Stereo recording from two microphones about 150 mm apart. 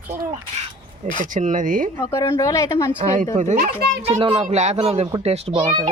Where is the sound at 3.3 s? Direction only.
55° right (ahead or behind).